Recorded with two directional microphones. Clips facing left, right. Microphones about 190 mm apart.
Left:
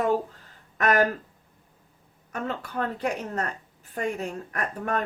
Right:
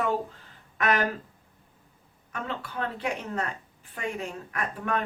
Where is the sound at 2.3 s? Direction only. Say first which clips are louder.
Left 3 dB; 45° left (ahead or behind).